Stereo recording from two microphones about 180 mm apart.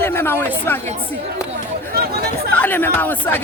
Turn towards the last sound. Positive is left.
turn(degrees=10)  # may be behind; listen again after turning